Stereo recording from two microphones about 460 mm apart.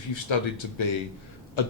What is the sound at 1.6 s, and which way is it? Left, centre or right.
Beatboxing, left.